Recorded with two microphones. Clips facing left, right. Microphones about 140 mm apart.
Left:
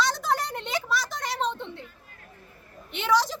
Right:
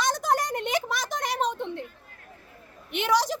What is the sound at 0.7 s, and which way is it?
Speech, 20° right (ahead or behind).